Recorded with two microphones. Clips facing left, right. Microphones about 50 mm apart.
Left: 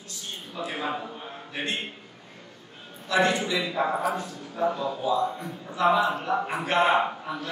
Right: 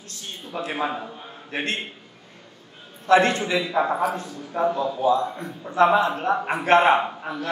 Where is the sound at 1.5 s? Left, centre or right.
Right.